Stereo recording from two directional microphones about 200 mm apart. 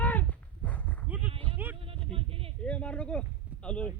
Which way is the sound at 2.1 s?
30° right (ahead or behind).